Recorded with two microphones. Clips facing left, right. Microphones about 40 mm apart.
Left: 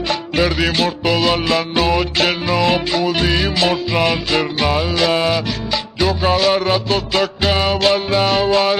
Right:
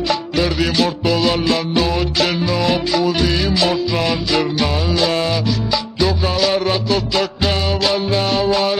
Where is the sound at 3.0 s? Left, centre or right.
Left.